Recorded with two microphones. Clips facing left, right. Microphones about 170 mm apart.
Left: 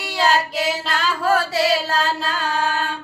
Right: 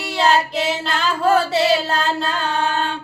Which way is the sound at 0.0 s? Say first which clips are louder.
Right 2 dB; centre (ahead or behind).